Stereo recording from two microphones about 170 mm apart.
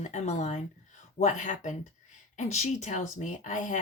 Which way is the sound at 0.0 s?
45° left (ahead or behind).